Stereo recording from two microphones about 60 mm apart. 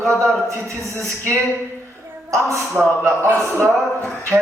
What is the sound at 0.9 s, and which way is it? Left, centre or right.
Speech, right.